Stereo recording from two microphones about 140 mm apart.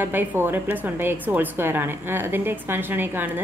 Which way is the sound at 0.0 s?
15° right (ahead or behind).